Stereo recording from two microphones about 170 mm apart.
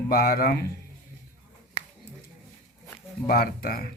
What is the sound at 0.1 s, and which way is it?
Speech, 60° left (ahead or behind).